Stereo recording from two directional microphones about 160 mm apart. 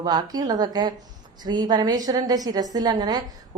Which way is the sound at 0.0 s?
25° right (ahead or behind).